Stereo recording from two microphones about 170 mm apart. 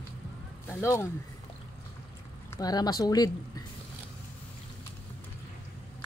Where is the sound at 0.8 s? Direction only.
15° left (ahead or behind).